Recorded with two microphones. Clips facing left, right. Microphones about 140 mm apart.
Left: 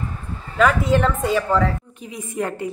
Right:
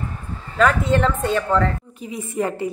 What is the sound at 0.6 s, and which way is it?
A woman's voice, 5° left (ahead or behind).